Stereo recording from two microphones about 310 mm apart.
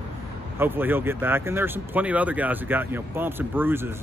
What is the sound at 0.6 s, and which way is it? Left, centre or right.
A man's voice, centre.